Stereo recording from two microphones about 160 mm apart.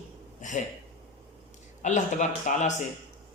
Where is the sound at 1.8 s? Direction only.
50° left (ahead or behind).